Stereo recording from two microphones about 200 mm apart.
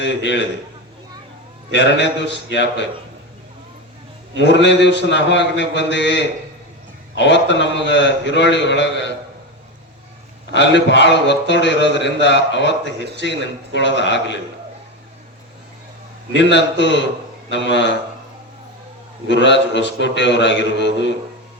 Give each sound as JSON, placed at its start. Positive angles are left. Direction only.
{"t": 0.0, "sound": "a man's voice", "side_deg": 60}
{"t": 1.7, "sound": "a man's voice", "side_deg": 60}
{"t": 4.4, "sound": "a man's voice", "side_deg": 60}
{"t": 10.5, "sound": "a man's voice", "side_deg": 60}
{"t": 13.7, "sound": "a man's voice", "side_deg": 60}
{"t": 16.3, "sound": "a man's voice", "side_deg": 60}
{"t": 19.3, "sound": "a man's voice", "side_deg": 60}